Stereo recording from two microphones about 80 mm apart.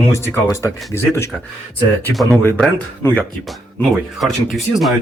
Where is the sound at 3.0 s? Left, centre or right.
Left.